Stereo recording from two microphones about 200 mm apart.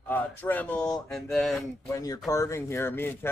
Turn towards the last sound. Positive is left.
turn(degrees=10)  # may be behind; listen again after turning